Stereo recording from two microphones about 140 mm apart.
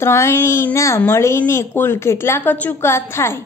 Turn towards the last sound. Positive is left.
turn(degrees=20)  # may be behind; listen again after turning